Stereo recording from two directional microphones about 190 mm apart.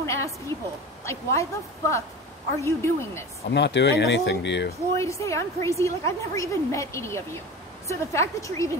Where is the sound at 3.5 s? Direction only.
65° left (ahead or behind).